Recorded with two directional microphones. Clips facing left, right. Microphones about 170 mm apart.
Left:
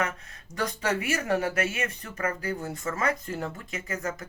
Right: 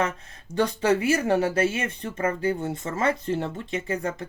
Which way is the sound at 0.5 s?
30° right (ahead or behind).